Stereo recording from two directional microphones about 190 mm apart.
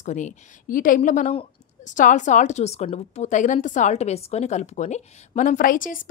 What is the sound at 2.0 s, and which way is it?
A woman's voice, 40° left (ahead or behind).